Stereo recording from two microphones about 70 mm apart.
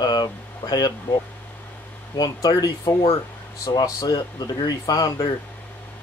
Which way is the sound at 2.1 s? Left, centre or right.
Left.